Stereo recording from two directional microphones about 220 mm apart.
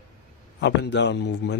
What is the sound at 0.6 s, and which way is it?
Speech, 50° left (ahead or behind).